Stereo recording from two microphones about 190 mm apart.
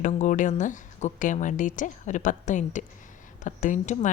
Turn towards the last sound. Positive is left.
turn(degrees=40)  # may be behind; listen again after turning